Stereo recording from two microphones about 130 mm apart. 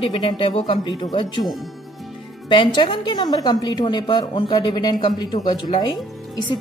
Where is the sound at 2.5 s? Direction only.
40° left (ahead or behind).